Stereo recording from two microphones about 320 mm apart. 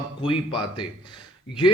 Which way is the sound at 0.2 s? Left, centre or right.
Centre.